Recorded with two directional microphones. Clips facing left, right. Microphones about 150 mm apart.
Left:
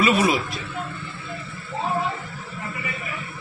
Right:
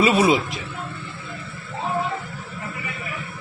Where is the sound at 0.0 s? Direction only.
30° right (ahead or behind).